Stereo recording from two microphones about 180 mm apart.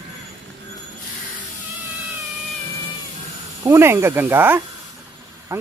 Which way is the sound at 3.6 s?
15° right (ahead or behind).